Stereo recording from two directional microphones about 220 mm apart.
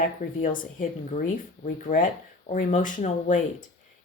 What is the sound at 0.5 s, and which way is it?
Speech, 35° left (ahead or behind).